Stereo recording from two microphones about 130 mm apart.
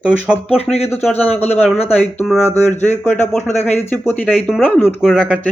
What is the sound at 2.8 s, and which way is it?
Speech, 15° left (ahead or behind).